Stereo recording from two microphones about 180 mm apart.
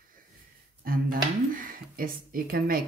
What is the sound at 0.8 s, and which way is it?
Speech, 50° right (ahead or behind).